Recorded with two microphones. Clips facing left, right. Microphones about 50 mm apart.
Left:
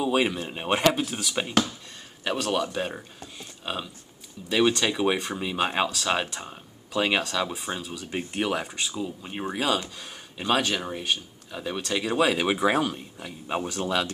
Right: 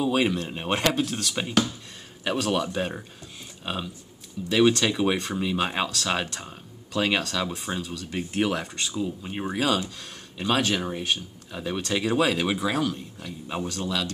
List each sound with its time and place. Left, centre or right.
0.0 s speech: centre
7.9 s speech: centre
8.3 s speech: centre
12.4 s speech: left